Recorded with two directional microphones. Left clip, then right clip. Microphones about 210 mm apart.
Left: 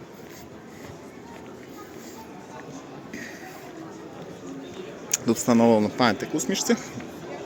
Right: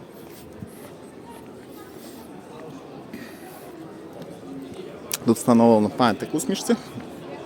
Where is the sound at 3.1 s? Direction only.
15° right (ahead or behind).